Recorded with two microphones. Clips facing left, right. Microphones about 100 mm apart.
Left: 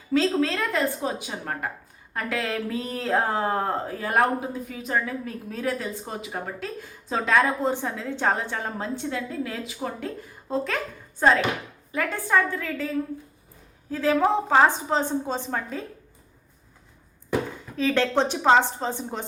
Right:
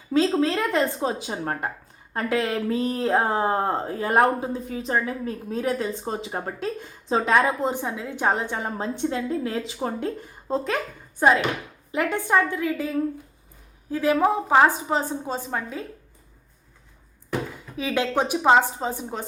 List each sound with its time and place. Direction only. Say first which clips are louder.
0.1 s speech: right 2 dB; 25° right (ahead or behind)
11.2 s a woman's voice: right 1 dB; 15° right (ahead or behind)
13.9 s a woman's voice: right 1 dB; 15° right (ahead or behind)
17.7 s a woman's voice: left 2 dB; 10° right (ahead or behind)